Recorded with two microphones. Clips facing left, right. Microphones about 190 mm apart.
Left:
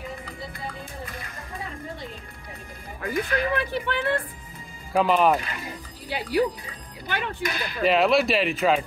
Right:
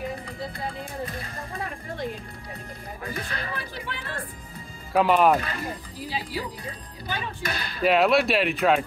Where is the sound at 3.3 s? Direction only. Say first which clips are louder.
Left 9 dB; 65° left (ahead or behind).